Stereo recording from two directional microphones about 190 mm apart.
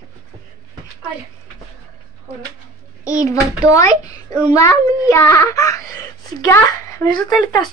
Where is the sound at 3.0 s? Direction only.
15° left (ahead or behind).